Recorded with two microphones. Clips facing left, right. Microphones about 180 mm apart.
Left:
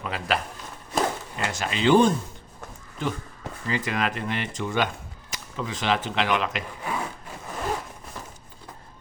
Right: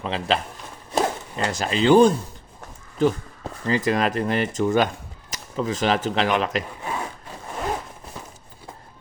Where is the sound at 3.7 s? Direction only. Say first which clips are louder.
Right 6 dB; 40° right (ahead or behind).